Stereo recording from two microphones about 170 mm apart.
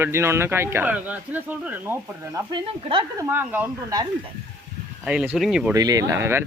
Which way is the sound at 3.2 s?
10° right (ahead or behind).